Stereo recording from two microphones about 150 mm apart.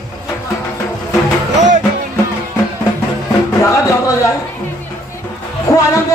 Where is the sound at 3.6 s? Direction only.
20° left (ahead or behind).